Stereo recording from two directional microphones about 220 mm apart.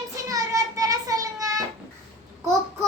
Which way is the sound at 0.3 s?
15° right (ahead or behind).